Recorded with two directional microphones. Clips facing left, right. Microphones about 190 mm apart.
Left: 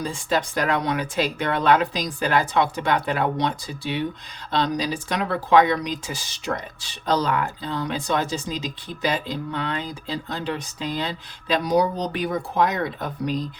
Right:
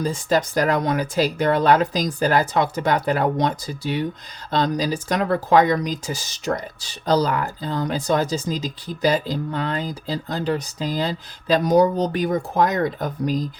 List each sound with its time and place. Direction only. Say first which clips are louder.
0.0 s speech: right 4 dB; 40° right (ahead or behind)